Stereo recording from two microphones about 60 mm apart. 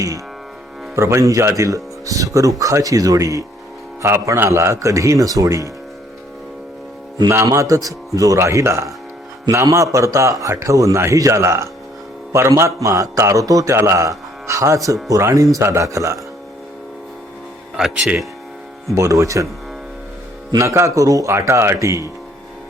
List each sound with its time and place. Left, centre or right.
0.9 s speech: right
4.4 s a man's voice: right
7.4 s a man's voice: right
13.7 s a man's voice: right
17.8 s speech: centre
18.9 s a man's voice: right
20.6 s a man's voice: right
21.3 s a man's voice: right